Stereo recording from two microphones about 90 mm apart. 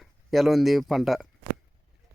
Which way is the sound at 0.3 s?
Centre (ahead or behind).